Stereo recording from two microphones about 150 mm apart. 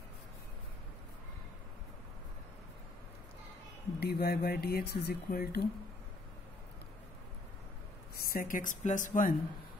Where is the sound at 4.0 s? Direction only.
90° left.